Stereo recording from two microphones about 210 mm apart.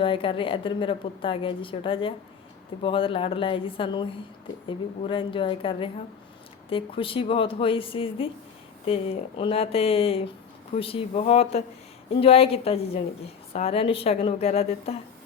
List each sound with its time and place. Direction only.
0.0 s a woman's voice: 25° left (ahead or behind)